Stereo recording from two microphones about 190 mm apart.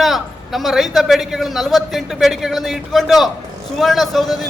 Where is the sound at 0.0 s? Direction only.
Centre (ahead or behind).